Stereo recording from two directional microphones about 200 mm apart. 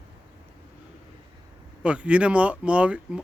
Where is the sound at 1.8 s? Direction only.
5° right (ahead or behind).